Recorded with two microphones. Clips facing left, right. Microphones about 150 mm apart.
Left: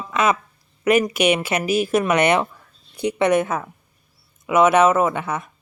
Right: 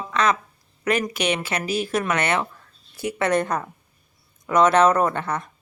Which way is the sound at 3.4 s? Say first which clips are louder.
Left 1 dB; 5° left (ahead or behind).